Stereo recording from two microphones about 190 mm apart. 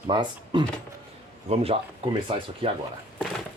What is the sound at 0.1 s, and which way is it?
Speech, 25° right (ahead or behind).